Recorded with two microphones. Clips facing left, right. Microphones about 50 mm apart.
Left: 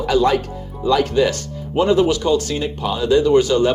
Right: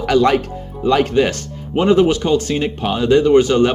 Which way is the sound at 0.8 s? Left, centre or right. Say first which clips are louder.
Right 2 dB; right.